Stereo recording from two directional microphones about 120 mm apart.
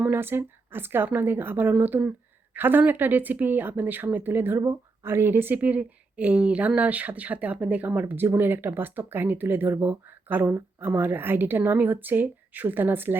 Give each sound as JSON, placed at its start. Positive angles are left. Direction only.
{"t": 0.0, "sound": "a woman's voice", "side_deg": -20}